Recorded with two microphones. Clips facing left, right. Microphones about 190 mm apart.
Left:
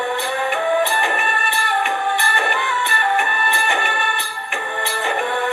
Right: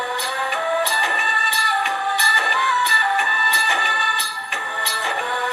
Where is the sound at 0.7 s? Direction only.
15° left (ahead or behind).